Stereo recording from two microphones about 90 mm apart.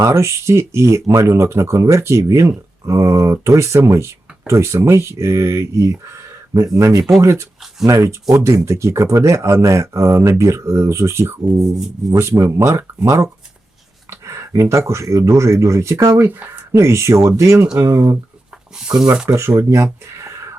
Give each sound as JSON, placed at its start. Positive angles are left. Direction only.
{"t": 0.0, "sound": "speech", "side_deg": -30}
{"t": 14.1, "sound": "a sound", "side_deg": -30}
{"t": 15.1, "sound": "speech", "side_deg": -35}
{"t": 16.1, "sound": "speech", "side_deg": -20}
{"t": 16.7, "sound": "speech", "side_deg": -30}
{"t": 18.9, "sound": "speech", "side_deg": -15}
{"t": 19.3, "sound": "speech", "side_deg": -30}